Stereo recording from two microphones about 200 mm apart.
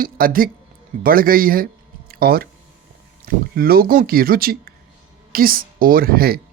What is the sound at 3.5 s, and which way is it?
A woman's voice, 50° right (ahead or behind).